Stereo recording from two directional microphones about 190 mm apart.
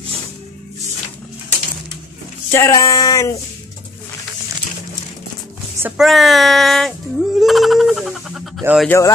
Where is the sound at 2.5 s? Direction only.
15° left (ahead or behind).